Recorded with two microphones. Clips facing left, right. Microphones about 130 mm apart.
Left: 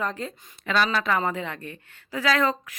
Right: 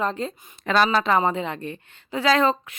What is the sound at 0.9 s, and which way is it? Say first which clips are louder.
Speech: right 4 dB; 25° right (ahead or behind).